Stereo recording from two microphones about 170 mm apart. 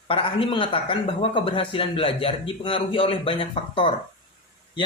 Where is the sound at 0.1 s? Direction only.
35° left (ahead or behind).